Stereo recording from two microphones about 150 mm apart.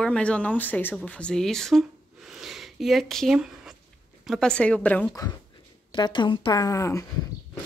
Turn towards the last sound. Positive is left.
turn(degrees=20)  # may be behind; listen again after turning